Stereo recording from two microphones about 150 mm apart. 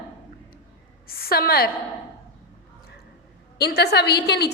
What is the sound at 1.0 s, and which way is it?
Speech, 85° left.